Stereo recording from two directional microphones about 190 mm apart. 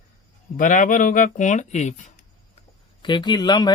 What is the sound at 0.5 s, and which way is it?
Speech, 45° left (ahead or behind).